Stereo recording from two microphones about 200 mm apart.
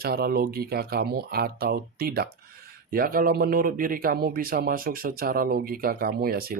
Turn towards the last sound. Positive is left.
turn(degrees=-50)  # may be behind; listen again after turning